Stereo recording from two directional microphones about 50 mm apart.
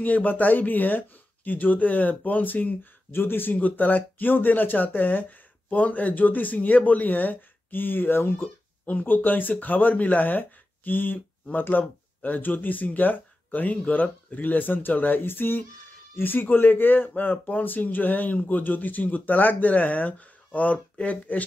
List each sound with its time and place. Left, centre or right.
0.0 s speech: left
3.1 s a man's voice: left
3.5 s speech: left
8.8 s a man's voice: left